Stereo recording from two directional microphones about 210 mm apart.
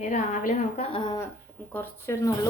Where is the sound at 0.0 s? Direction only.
35° left (ahead or behind).